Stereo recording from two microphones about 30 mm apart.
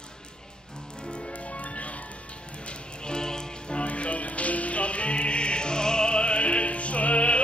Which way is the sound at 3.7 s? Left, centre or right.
Left.